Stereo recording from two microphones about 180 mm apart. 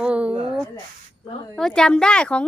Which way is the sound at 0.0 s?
5° right (ahead or behind).